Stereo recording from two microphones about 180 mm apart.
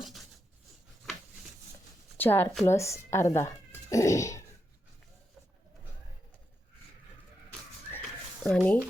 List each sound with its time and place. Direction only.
2.1 s speech: 10° left (ahead or behind)
8.4 s speech: 5° left (ahead or behind)